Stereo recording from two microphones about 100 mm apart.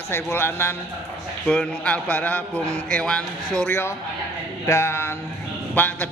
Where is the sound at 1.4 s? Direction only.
10° left (ahead or behind).